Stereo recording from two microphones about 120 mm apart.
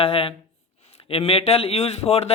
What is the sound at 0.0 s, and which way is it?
A man's voice, 55° left (ahead or behind).